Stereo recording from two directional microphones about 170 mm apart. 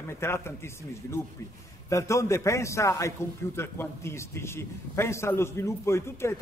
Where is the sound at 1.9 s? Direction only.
15° left (ahead or behind).